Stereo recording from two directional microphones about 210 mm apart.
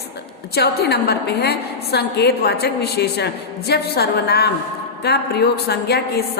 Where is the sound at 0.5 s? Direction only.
50° left (ahead or behind).